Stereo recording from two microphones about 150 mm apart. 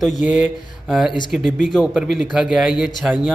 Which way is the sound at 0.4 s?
5° right (ahead or behind).